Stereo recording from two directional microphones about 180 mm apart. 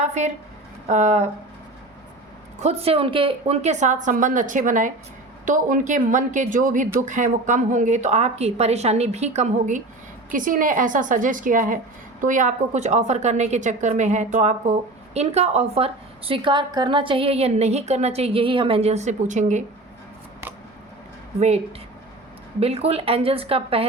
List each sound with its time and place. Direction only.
0.0 s a woman's voice: 40° right (ahead or behind)
2.6 s a woman's voice: 35° right (ahead or behind)
21.3 s a woman's voice: 35° right (ahead or behind)
22.6 s a woman's voice: 35° right (ahead or behind)